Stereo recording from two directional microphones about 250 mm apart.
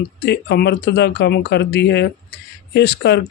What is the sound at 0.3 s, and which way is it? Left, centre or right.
Speech, left.